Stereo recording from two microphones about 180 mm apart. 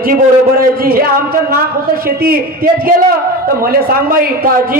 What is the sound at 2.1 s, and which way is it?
A man's voice, 55° right (ahead or behind).